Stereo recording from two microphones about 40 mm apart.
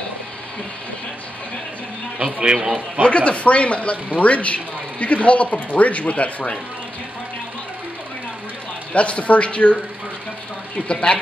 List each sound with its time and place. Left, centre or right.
2.1 s speech: right
3.0 s speech: left
8.9 s speech: left
10.9 s speech: left